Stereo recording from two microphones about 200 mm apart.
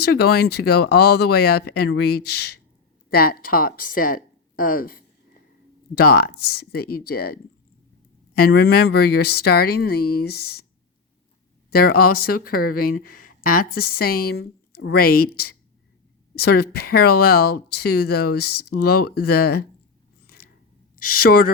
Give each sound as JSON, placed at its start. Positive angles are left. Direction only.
{"t": 0.0, "sound": "speech", "side_deg": 55}
{"t": 8.4, "sound": "speech", "side_deg": 50}
{"t": 11.7, "sound": "speech", "side_deg": 50}
{"t": 16.3, "sound": "speech", "side_deg": 50}
{"t": 20.2, "sound": "a sound", "side_deg": 50}
{"t": 20.9, "sound": "speech", "side_deg": 45}